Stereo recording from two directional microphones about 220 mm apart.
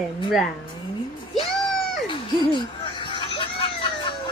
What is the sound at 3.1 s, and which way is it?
Music, 20° left (ahead or behind).